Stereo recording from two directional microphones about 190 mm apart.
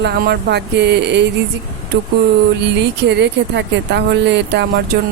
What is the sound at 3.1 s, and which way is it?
Speech, 65° right (ahead or behind).